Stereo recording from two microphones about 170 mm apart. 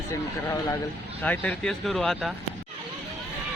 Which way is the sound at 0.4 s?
20° left (ahead or behind).